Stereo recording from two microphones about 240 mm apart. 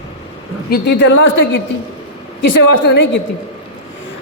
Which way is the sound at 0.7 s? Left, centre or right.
Left.